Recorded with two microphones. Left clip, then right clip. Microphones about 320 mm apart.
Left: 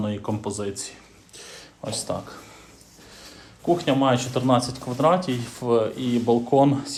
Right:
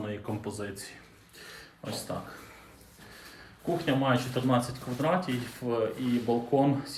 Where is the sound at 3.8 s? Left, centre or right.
Centre.